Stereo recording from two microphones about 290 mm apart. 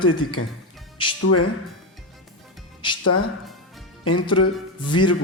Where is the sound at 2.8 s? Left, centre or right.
Centre.